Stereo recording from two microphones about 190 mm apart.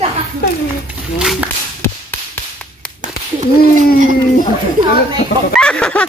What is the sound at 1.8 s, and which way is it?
Chop, 10° left (ahead or behind).